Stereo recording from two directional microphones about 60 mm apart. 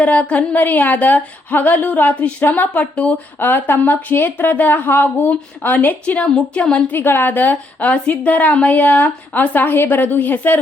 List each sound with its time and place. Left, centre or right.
0.0 s a woman's voice: left
3.4 s speech: left
6.9 s a woman's voice: left